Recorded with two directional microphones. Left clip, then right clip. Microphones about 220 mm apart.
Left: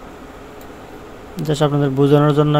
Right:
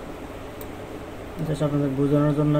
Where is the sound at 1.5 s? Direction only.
45° left (ahead or behind).